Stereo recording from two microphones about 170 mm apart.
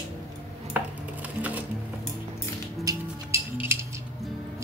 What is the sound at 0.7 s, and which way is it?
Music, 10° right (ahead or behind).